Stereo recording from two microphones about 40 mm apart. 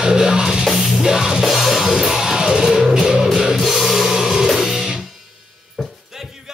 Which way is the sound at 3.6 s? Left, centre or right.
Centre.